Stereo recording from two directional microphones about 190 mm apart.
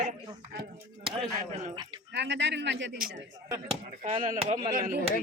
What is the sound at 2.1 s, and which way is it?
Speech, 65° right (ahead or behind).